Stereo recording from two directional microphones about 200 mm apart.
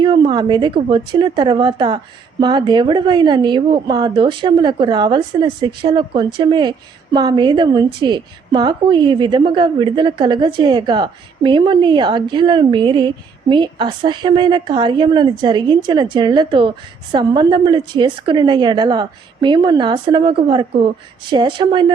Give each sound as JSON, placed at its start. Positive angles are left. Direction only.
{"t": 0.0, "sound": "speech", "side_deg": -20}